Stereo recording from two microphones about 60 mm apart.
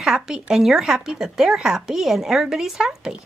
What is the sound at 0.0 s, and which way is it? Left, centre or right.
A woman's voice, centre.